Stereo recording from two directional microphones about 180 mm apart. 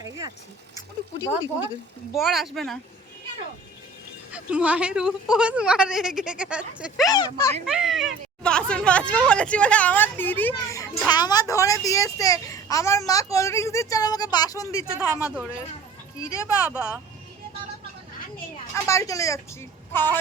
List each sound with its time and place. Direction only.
2.1 s speech: centre (ahead or behind)
4.3 s a child's voice: 5° right (ahead or behind); by 14.8 s 20° left (ahead or behind)
14.9 s speech: 10° right (ahead or behind)
16.2 s speech: 15° left (ahead or behind)
16.7 s speech: 5° right (ahead or behind)
18.7 s speech: 15° left (ahead or behind)